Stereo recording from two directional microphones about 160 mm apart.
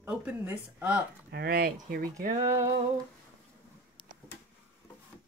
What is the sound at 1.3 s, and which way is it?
Speech, 70° right (ahead or behind).